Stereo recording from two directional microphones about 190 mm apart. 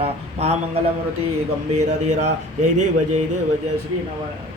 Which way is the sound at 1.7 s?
40° right (ahead or behind).